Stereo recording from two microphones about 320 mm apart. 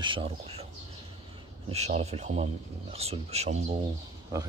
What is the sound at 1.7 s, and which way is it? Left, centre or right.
Speech, centre.